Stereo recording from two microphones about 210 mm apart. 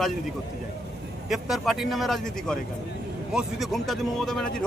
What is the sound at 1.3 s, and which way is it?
A man's voice, centre (ahead or behind).